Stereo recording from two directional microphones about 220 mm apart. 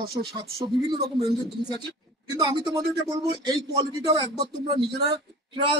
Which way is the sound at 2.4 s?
20° right (ahead or behind).